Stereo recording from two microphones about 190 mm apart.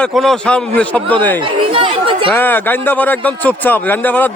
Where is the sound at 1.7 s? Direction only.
25° right (ahead or behind).